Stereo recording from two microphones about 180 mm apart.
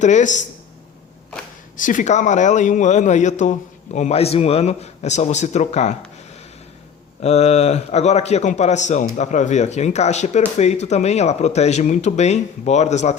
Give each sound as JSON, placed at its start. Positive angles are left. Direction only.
{"t": 0.0, "sound": "speech", "side_deg": 40}
{"t": 1.7, "sound": "a man's voice", "side_deg": 45}
{"t": 7.2, "sound": "a man's voice", "side_deg": 40}